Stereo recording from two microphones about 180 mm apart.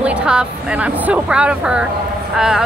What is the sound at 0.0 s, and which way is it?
A woman's voice, 5° right (ahead or behind).